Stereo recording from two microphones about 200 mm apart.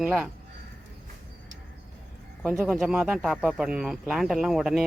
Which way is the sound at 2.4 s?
5° right (ahead or behind).